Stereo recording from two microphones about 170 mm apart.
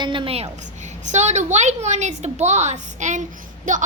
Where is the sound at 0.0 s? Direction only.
30° right (ahead or behind).